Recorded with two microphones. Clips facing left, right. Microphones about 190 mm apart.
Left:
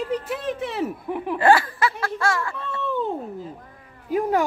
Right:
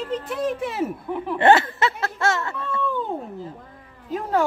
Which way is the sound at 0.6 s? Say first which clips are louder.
Right 1 dB; centre (ahead or behind).